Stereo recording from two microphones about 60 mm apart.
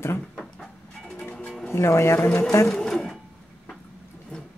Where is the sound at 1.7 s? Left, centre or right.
Left.